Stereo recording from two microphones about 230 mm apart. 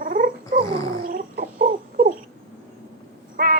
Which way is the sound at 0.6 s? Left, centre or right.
Centre.